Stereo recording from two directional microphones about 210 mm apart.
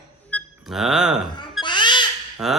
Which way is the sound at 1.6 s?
20° left (ahead or behind).